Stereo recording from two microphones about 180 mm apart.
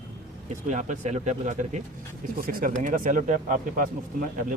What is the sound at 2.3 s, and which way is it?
A man's voice, 50° right (ahead or behind).